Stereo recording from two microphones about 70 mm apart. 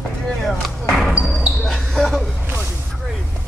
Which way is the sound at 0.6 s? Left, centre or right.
Centre.